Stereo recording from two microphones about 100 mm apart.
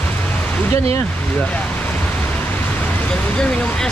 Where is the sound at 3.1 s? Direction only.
10° left (ahead or behind).